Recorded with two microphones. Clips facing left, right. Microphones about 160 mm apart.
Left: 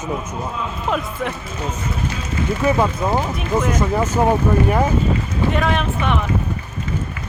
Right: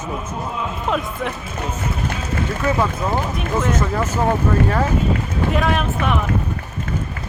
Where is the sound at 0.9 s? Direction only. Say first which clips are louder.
Even; centre (ahead or behind).